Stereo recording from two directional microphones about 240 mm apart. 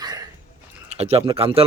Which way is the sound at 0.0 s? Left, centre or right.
Centre.